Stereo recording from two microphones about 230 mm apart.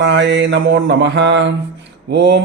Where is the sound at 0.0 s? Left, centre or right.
Right.